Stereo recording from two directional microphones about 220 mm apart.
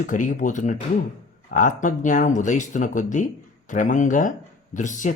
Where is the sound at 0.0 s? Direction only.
35° left (ahead or behind).